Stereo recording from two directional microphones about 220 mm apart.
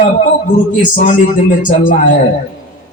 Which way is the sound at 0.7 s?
35° left (ahead or behind).